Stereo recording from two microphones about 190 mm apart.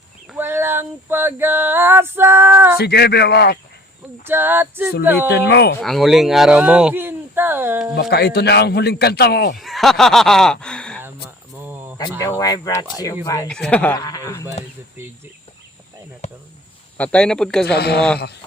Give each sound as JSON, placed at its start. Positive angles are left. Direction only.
{"t": 0.3, "sound": "a sound", "side_deg": -10}
{"t": 2.7, "sound": "a man's voice", "side_deg": 60}
{"t": 4.3, "sound": "female singing", "side_deg": -10}
{"t": 5.3, "sound": "a man's voice", "side_deg": 60}
{"t": 5.8, "sound": "speech", "side_deg": 0}
{"t": 8.1, "sound": "a man's voice", "side_deg": 55}
{"t": 9.6, "sound": "speech", "side_deg": 0}
{"t": 11.6, "sound": "a sound", "side_deg": -10}
{"t": 11.9, "sound": "speech", "side_deg": 20}
{"t": 13.5, "sound": "speech", "side_deg": 5}
{"t": 13.9, "sound": "speech", "side_deg": 20}
{"t": 17.0, "sound": "speech", "side_deg": 5}
{"t": 17.7, "sound": "a man's voice", "side_deg": 60}